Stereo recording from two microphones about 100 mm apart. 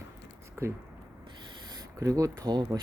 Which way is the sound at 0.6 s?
25° right (ahead or behind).